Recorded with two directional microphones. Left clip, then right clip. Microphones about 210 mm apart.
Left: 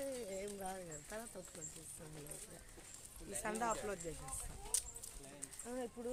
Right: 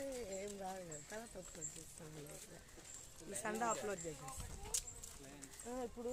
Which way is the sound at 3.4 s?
Centre (ahead or behind).